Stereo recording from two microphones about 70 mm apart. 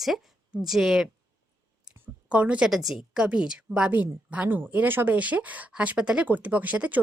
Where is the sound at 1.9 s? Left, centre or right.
Centre.